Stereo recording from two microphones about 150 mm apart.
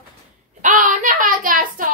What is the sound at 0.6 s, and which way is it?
Speech, 60° right (ahead or behind).